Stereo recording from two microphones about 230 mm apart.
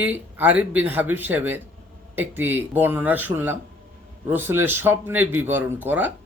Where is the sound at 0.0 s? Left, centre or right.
Centre.